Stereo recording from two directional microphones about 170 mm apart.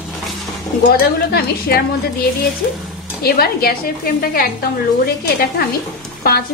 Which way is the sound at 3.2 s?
60° left (ahead or behind).